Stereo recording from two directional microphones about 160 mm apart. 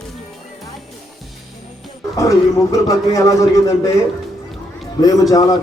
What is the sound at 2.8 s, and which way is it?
Speech, 20° left (ahead or behind).